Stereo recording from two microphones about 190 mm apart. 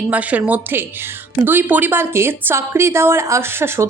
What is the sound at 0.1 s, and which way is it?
Speech, 10° right (ahead or behind).